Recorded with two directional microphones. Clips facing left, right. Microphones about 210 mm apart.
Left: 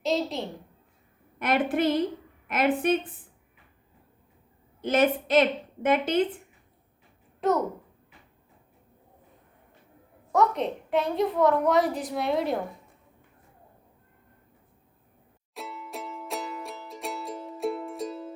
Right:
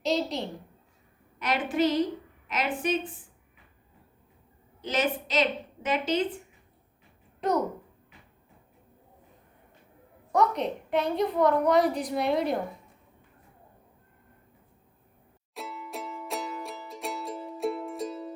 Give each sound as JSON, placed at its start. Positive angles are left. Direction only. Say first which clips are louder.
{"t": 0.0, "sound": "a sound", "louder": "left 1 dB", "side_deg": 0}
{"t": 1.4, "sound": "a woman's voice", "louder": "left 2 dB", "side_deg": 55}
{"t": 4.8, "sound": "a woman's voice", "louder": "left 5 dB", "side_deg": 55}
{"t": 10.3, "sound": "a woman's voice", "louder": "left 1 dB", "side_deg": 0}
{"t": 15.5, "sound": "music", "louder": "even", "side_deg": 0}